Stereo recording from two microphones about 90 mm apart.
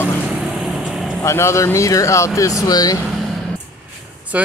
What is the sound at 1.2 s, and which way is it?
Speech, 30° left (ahead or behind).